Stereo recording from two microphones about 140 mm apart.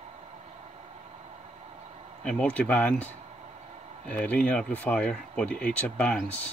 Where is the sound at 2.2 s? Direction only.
5° left (ahead or behind).